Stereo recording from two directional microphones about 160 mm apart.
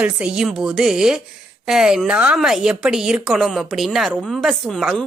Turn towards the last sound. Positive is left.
turn(degrees=0)  # may be behind; listen again after turning